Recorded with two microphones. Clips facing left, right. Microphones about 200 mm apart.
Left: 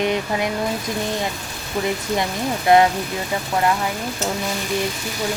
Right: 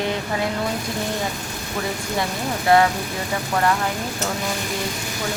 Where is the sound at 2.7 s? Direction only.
20° left (ahead or behind).